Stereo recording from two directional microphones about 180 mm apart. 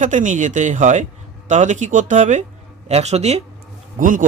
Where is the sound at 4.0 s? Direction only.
50° right (ahead or behind).